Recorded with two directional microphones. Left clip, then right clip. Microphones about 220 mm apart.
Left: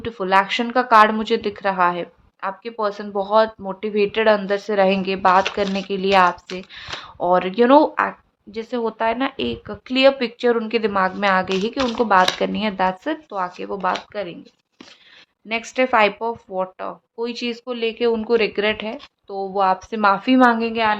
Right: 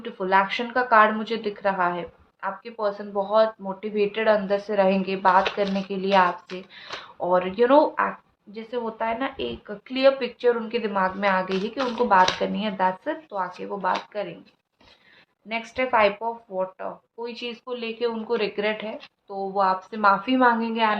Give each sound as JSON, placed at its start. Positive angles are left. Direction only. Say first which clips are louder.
{"t": 0.0, "sound": "a woman's voice", "louder": "left 4 dB", "side_deg": 55}
{"t": 15.4, "sound": "a woman's voice", "louder": "left 6 dB", "side_deg": 50}